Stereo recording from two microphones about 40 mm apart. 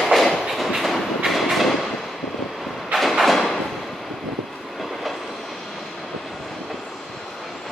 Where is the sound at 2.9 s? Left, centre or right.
Centre.